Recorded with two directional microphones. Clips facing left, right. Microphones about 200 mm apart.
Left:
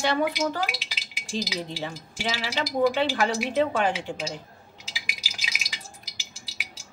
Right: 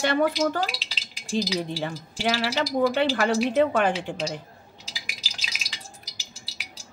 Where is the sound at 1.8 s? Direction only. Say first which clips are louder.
Right 4 dB; 55° right (ahead or behind).